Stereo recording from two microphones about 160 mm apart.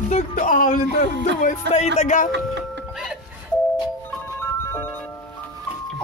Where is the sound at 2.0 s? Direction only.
50° left (ahead or behind).